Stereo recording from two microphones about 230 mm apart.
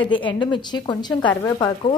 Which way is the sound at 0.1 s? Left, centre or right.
Left.